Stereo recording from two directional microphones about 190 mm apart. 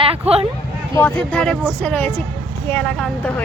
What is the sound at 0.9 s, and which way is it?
Speech, 10° left (ahead or behind).